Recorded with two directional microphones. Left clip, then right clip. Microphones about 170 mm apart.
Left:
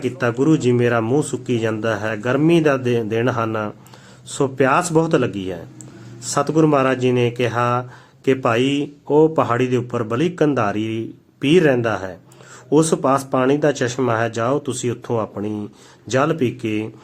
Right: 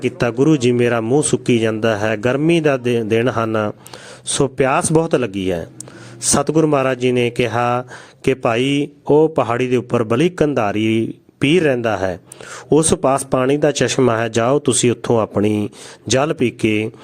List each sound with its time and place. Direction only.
0.0 s speech: 40° right (ahead or behind)